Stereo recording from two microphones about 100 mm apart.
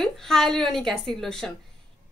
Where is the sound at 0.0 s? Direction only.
5° left (ahead or behind).